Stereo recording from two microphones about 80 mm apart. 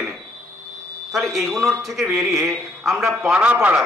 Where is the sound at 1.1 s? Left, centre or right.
Centre.